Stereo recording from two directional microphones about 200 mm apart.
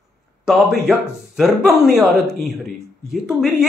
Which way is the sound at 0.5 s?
Centre (ahead or behind).